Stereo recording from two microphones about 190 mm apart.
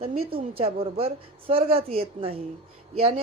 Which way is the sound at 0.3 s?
30° right (ahead or behind).